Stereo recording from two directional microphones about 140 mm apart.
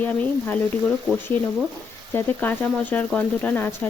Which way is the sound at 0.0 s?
10° left (ahead or behind).